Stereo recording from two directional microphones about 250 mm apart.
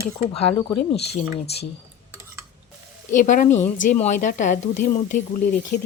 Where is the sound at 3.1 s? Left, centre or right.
Left.